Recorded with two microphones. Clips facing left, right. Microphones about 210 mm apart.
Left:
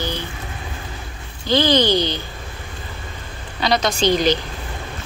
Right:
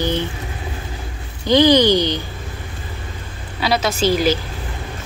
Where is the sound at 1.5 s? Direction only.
15° right (ahead or behind).